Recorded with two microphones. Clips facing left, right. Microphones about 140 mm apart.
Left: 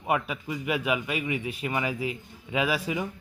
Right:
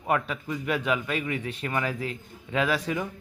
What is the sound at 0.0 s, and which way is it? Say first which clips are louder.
Speech: right 1 dB; 5° left (ahead or behind).